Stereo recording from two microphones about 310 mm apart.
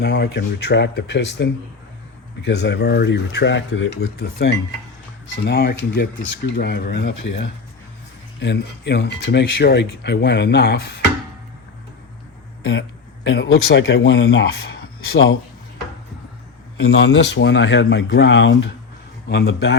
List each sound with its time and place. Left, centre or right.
0.0 s speech: left
5.5 s speech: left
13.2 s speech: left
16.7 s speech: left